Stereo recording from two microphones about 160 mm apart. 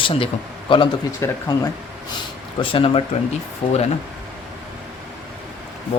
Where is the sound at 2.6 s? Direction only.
35° left (ahead or behind).